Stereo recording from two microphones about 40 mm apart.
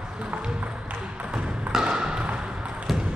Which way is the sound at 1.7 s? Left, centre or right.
Centre.